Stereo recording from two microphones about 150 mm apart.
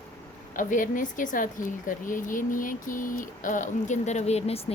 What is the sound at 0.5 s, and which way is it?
A woman's voice, 60° left (ahead or behind).